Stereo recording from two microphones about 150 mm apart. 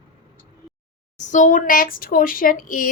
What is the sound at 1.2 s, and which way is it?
Speech, 55° left (ahead or behind).